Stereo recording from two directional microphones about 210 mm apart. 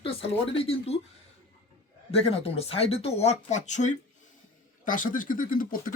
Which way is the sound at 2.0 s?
30° left (ahead or behind).